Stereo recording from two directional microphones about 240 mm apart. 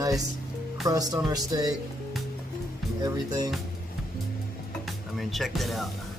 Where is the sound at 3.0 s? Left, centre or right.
Centre.